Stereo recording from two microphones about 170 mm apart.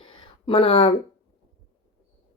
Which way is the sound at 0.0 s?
30° left (ahead or behind).